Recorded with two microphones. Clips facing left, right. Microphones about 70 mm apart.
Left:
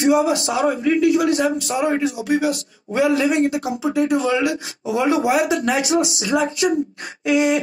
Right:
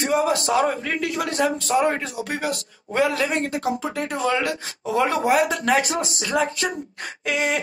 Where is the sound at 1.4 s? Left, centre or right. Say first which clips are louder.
Even; right.